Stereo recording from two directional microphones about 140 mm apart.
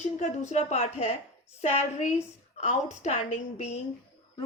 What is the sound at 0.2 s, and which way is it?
Speech, 55° left (ahead or behind).